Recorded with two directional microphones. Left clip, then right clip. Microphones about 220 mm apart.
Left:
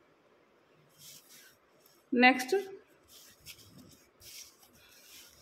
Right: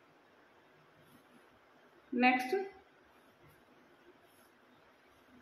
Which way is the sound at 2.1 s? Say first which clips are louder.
Left 5 dB; 40° left (ahead or behind).